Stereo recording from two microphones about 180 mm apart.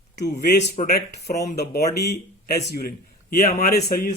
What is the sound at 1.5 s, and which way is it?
A man's voice, 65° left (ahead or behind).